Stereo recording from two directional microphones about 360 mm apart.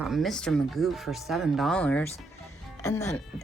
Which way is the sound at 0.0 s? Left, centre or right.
Centre.